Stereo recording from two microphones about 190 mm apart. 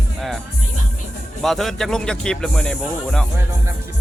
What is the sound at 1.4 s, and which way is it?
Speech, centre (ahead or behind).